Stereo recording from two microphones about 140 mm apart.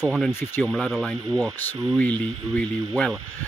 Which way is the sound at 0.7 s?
Centre (ahead or behind).